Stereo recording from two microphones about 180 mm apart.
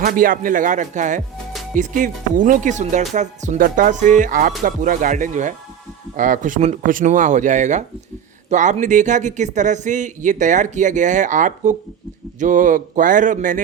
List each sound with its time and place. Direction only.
0.0 s a man's voice: 50° right (ahead or behind)